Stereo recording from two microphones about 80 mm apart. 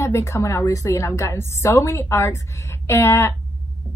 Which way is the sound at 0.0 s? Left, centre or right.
Left.